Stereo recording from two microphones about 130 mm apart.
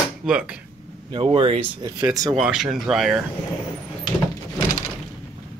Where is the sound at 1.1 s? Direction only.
45° right (ahead or behind).